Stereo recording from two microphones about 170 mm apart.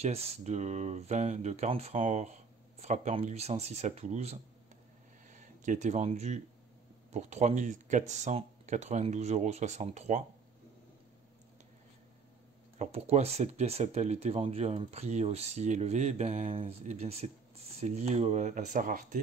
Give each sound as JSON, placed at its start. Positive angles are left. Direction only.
{"t": 0.0, "sound": "speech", "side_deg": -40}
{"t": 12.7, "sound": "speech", "side_deg": -40}